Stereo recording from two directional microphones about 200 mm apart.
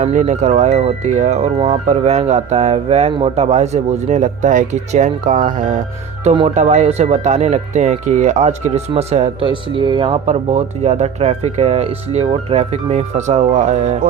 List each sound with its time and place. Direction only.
0.0 s speech: 40° right (ahead or behind)
6.2 s speech: 30° right (ahead or behind)